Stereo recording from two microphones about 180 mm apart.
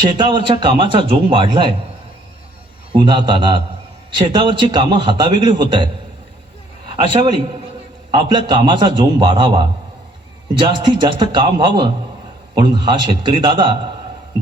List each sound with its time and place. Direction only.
0.0 s a man's voice: 25° right (ahead or behind)
2.9 s a man's voice: 25° right (ahead or behind)
6.9 s a man's voice: 25° right (ahead or behind)